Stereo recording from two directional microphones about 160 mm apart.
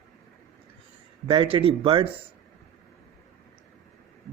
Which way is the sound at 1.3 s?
30° right (ahead or behind).